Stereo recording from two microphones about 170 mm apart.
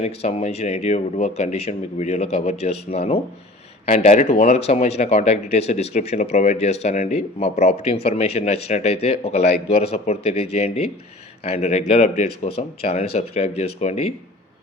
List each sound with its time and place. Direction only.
0.0 s speech: 35° left (ahead or behind)